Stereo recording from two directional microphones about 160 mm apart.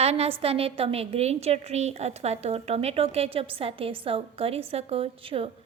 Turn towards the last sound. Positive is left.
turn(degrees=-35)  # may be behind; listen again after turning